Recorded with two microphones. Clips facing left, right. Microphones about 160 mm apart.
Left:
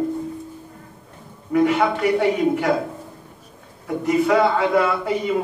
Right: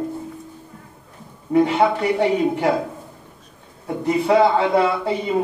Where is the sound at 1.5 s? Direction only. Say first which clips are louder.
Right 1 dB; 30° right (ahead or behind).